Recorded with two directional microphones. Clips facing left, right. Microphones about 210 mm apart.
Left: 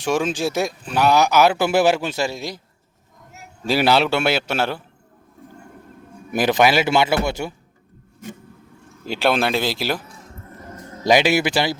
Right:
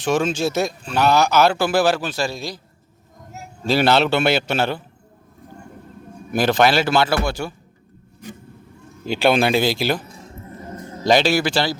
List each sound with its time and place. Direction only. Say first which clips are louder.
0.0 s speech: right 1 dB; 10° left (ahead or behind)
3.7 s speech: right 1 dB; 10° left (ahead or behind)
6.3 s a man's voice: even; 15° left (ahead or behind)
9.0 s speech: right 3 dB; centre (ahead or behind)
11.0 s speech: even; 15° left (ahead or behind)